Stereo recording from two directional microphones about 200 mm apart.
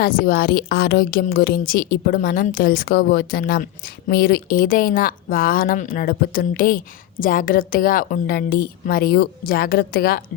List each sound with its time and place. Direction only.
0.0 s speech: 45° left (ahead or behind)